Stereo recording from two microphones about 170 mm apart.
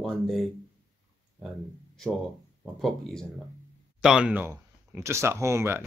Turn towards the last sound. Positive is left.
turn(degrees=-15)  # may be behind; listen again after turning